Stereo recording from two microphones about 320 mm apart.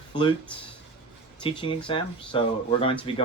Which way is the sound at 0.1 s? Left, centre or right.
Centre.